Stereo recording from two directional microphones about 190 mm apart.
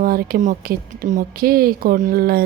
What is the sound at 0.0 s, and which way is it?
Speech, 50° right (ahead or behind).